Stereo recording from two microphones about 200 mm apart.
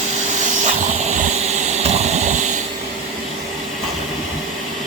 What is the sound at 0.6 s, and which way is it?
Vehicle, 35° right (ahead or behind).